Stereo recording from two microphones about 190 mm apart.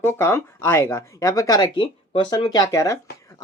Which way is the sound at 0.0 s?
10° left (ahead or behind).